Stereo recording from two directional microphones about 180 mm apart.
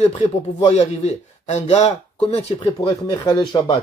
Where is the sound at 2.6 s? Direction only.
20° left (ahead or behind).